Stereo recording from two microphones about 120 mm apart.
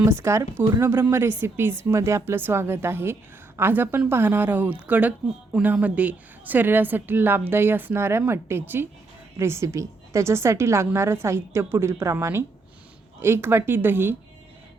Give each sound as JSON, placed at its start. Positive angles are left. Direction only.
{"t": 0.0, "sound": "a woman's voice", "side_deg": -20}